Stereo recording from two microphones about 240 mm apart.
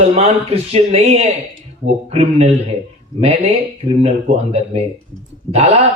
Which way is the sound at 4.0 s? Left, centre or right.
Right.